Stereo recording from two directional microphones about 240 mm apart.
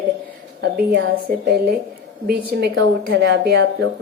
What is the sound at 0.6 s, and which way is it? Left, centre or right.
A woman's voice, right.